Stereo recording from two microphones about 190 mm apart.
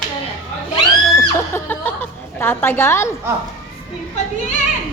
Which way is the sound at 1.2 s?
10° left (ahead or behind).